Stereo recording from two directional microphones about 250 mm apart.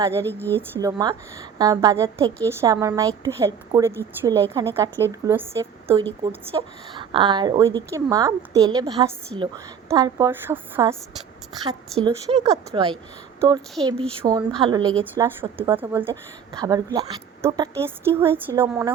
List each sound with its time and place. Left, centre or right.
0.0 s a woman's voice: centre
0.3 s speech: centre
0.7 s a woman's voice: centre
12.0 s a woman's voice: centre